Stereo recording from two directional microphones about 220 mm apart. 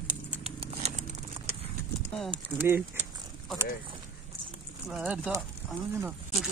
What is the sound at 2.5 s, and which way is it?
Speech, 10° right (ahead or behind).